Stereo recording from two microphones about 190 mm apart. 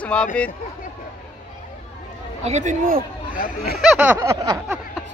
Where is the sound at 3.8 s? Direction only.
5° right (ahead or behind).